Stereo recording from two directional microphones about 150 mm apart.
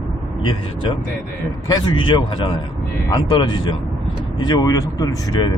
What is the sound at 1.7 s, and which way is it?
A man's voice, 30° left (ahead or behind).